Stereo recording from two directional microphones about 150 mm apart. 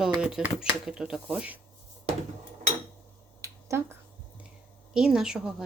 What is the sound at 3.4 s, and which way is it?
Finger snapping, 20° right (ahead or behind).